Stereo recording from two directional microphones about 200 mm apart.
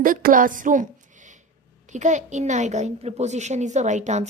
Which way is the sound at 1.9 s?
35° right (ahead or behind).